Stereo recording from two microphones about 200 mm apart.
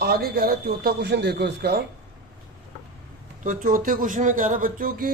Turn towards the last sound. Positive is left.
turn(degrees=-45)  # may be behind; listen again after turning